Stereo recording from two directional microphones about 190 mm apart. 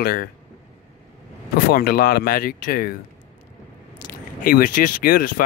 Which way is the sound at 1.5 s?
50° left (ahead or behind).